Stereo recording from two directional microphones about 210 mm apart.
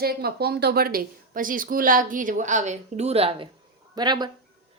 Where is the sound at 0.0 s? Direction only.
50° right (ahead or behind).